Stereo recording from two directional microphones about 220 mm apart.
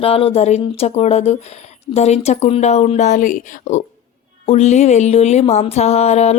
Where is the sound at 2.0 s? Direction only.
30° left (ahead or behind).